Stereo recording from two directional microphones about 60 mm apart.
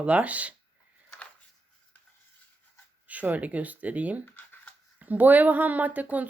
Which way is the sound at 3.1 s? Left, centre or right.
Right.